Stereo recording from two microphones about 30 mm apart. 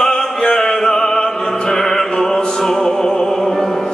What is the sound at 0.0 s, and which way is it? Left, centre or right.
Opera, centre.